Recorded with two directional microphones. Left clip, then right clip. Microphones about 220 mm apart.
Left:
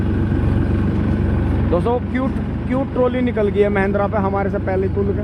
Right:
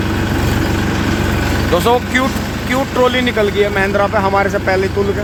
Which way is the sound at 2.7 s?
10° right (ahead or behind).